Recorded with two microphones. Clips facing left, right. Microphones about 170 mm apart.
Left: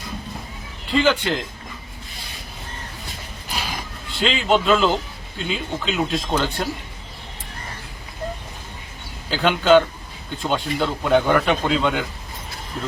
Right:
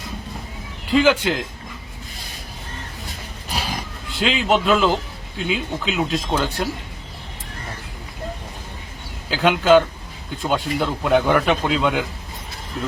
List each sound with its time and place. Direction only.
0.9 s a man's voice: 5° right (ahead or behind)
3.5 s a sound: 40° right (ahead or behind)
4.2 s a man's voice: 5° right (ahead or behind)
9.3 s a man's voice: 5° right (ahead or behind)